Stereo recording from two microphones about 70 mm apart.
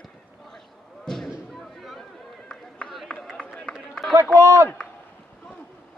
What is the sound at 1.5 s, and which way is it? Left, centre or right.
Run, centre.